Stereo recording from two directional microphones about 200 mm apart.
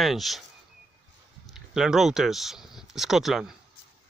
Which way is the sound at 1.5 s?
Centre (ahead or behind).